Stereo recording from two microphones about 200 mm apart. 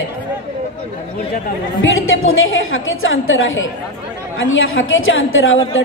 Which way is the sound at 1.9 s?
85° left.